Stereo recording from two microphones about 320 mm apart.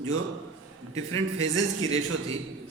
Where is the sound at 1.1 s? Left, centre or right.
Right.